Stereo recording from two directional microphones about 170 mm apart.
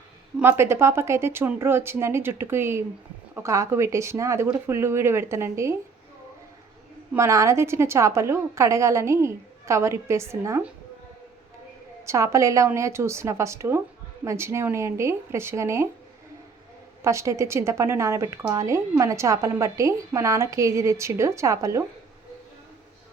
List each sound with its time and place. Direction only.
0.3 s a woman's voice: 15° right (ahead or behind)
7.1 s a woman's voice: 15° right (ahead or behind)
12.0 s a woman's voice: 15° right (ahead or behind)
17.0 s a woman's voice: 15° right (ahead or behind)